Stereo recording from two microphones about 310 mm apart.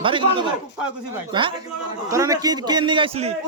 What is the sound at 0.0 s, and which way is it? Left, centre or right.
A man's voice, centre.